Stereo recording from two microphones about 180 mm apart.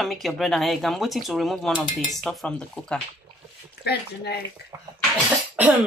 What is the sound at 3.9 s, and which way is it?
Speech, 65° left (ahead or behind).